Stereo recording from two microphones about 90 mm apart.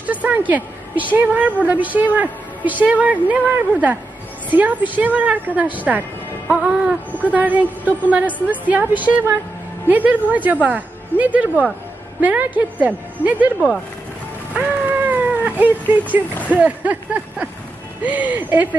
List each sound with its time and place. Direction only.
0.1 s a woman's voice: 15° right (ahead or behind)
6.5 s a sound: 10° right (ahead or behind)
7.3 s a woman's voice: 15° right (ahead or behind)
14.5 s cat: 15° right (ahead or behind)
16.5 s a woman's voice: 15° right (ahead or behind)